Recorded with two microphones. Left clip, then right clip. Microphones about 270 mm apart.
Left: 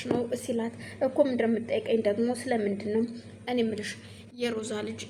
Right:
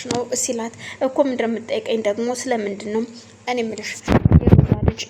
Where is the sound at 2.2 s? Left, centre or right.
Centre.